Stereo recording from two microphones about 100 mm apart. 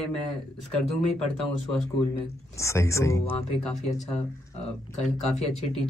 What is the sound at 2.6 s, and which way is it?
Speech, 30° left (ahead or behind).